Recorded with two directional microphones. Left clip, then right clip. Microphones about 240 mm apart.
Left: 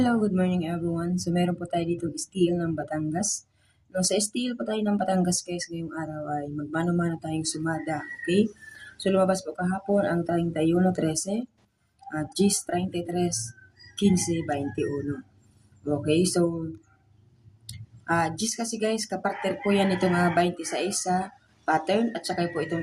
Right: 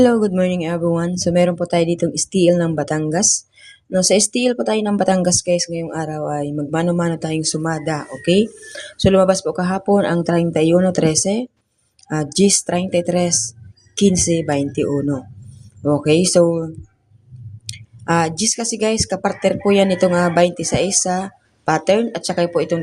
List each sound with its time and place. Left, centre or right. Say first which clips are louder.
0.0 s speech: right 11 dB; right
16.0 s speech: right 10 dB; right
17.7 s speech: right 8 dB; right